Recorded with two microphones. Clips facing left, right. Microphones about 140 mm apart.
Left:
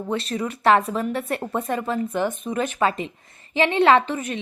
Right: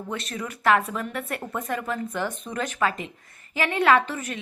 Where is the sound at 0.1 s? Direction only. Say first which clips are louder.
Left 7 dB; 25° left (ahead or behind).